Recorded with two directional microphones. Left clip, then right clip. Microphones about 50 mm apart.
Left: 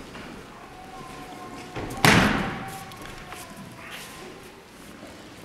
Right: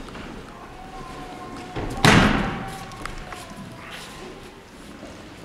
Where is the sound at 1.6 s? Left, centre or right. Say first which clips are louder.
Right 1 dB; centre.